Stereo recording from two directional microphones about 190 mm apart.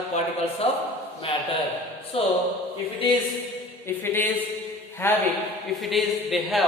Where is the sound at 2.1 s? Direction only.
30° left (ahead or behind).